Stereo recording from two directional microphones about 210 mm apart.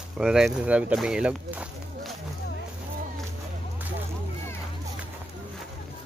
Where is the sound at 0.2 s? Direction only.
Centre (ahead or behind).